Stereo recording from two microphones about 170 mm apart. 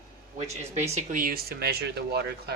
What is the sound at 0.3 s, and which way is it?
Speech, 40° right (ahead or behind).